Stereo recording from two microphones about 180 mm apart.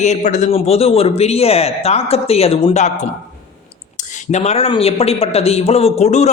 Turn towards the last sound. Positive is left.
turn(degrees=35)  # may be behind; listen again after turning